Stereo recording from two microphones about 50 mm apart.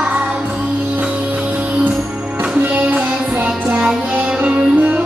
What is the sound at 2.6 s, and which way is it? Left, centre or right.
Music, right.